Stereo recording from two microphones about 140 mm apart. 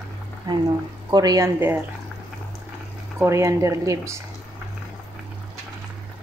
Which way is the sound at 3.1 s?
20° right (ahead or behind).